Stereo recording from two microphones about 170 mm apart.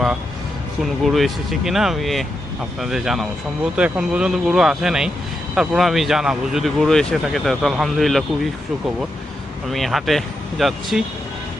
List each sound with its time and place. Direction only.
0.8 s speech: centre (ahead or behind)
9.6 s speech: centre (ahead or behind)